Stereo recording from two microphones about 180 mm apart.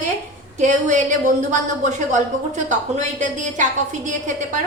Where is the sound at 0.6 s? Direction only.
45° right (ahead or behind).